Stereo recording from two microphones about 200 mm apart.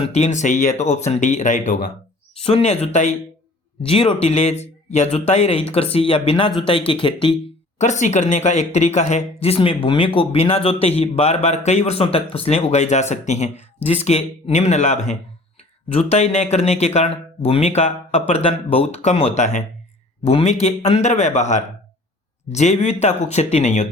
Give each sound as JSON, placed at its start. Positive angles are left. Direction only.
{"t": 0.0, "sound": "speech", "side_deg": 35}
{"t": 2.4, "sound": "speech", "side_deg": 30}
{"t": 7.8, "sound": "speech", "side_deg": 35}